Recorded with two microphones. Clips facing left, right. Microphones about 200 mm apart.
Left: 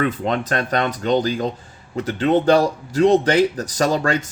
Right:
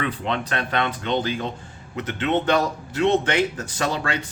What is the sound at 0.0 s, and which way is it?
Speech, 45° left (ahead or behind).